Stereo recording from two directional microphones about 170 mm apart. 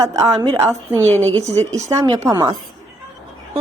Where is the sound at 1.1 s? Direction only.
10° left (ahead or behind).